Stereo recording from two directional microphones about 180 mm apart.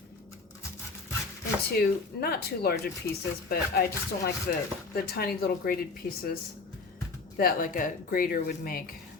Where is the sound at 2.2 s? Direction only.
60° left (ahead or behind).